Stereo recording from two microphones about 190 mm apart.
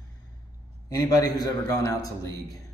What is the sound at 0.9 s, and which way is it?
Speech, 20° left (ahead or behind).